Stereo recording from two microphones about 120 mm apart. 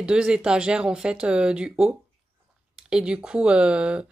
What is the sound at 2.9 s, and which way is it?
Speech, 5° right (ahead or behind).